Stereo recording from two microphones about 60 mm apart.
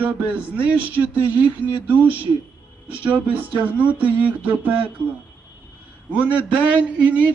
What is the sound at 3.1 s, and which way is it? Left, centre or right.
A man's voice, right.